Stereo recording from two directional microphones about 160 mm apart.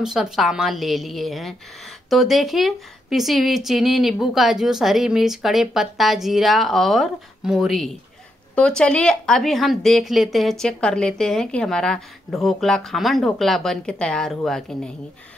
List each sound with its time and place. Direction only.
0.0 s speech: 5° right (ahead or behind)